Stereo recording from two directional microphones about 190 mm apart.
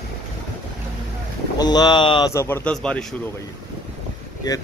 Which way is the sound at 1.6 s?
20° left (ahead or behind).